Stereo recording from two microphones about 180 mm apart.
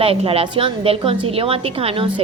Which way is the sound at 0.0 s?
30° right (ahead or behind).